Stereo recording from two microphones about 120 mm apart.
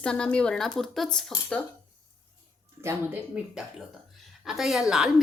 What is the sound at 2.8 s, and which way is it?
Speech, 25° right (ahead or behind).